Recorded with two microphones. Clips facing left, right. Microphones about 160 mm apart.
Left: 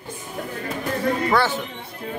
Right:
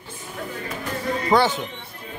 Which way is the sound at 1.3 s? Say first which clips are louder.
Right 5 dB; 15° right (ahead or behind).